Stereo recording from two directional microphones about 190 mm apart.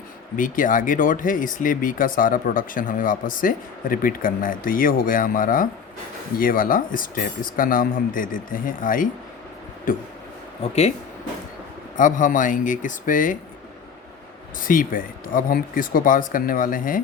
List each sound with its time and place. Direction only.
0.3 s speech: 45° left (ahead or behind)
10.6 s speech: 35° left (ahead or behind)
11.9 s speech: 45° left (ahead or behind)
14.6 s speech: 45° left (ahead or behind)